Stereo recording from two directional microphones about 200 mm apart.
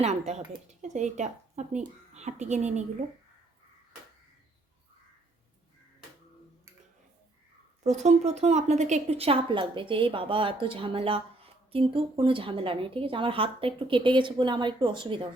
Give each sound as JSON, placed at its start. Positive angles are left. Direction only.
{"t": 0.0, "sound": "speech", "side_deg": -35}
{"t": 7.9, "sound": "a woman's voice", "side_deg": -35}